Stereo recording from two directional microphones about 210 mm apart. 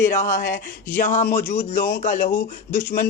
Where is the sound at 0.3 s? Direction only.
15° left (ahead or behind).